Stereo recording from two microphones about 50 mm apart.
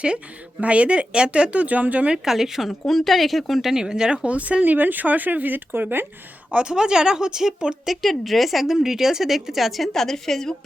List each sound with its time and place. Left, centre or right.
0.6 s speech: right
2.1 s a woman's voice: centre
3.8 s speech: centre; by 6.1 s right
6.5 s speech: right
7.9 s a woman's voice: centre